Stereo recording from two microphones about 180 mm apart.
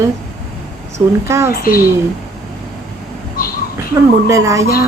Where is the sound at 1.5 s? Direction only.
55° left (ahead or behind).